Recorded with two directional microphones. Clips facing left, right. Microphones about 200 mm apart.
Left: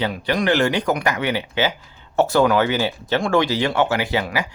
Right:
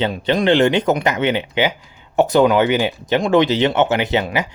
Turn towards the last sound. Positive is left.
turn(degrees=-20)  # may be behind; listen again after turning